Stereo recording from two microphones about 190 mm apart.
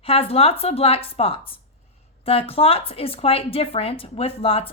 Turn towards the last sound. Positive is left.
turn(degrees=30)  # may be behind; listen again after turning